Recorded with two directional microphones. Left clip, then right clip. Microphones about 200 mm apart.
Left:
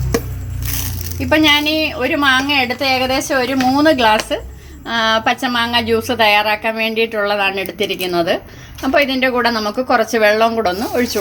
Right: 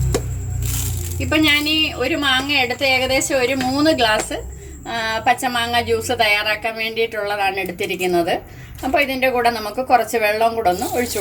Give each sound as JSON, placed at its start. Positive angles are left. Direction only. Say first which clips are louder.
{"t": 1.3, "sound": "a woman's voice", "louder": "left 4 dB", "side_deg": 50}
{"t": 4.9, "sound": "a woman's voice", "louder": "left 4 dB", "side_deg": 30}